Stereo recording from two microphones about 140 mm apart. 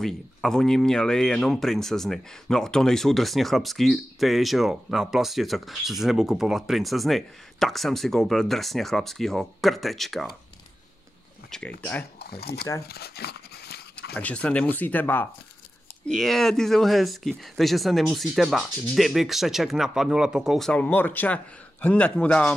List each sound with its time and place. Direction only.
0.0 s speech: 5° left (ahead or behind)
11.8 s speech: 15° left (ahead or behind)
12.3 s speech: 90° left
14.1 s speech: 10° left (ahead or behind)
16.1 s speech: centre (ahead or behind)